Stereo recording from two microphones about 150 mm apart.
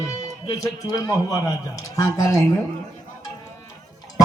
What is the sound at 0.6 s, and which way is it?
A man's voice, 25° left (ahead or behind).